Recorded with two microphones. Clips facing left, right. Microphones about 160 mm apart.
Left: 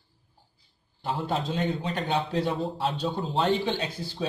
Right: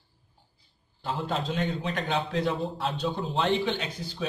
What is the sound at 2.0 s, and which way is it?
Speech, 30° left (ahead or behind).